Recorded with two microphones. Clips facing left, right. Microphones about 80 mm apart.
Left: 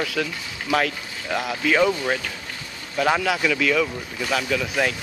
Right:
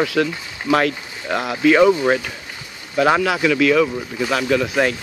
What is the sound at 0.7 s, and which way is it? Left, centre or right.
Speech, right.